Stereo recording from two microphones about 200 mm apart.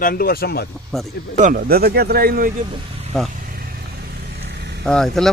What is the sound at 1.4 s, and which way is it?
Speech, 45° right (ahead or behind).